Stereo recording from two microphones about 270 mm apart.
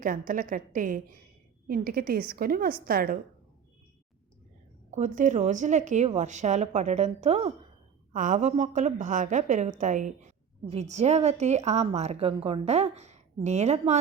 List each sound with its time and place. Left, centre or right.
0.0 s a woman's voice: right
4.9 s a woman's voice: right